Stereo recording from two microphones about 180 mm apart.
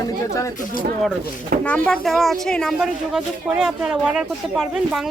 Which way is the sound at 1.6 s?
5° left (ahead or behind).